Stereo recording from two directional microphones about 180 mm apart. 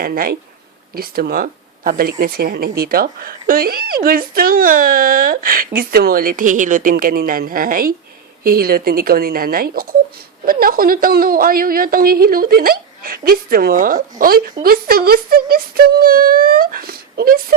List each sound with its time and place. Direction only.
0.0 s speech: 55° right (ahead or behind)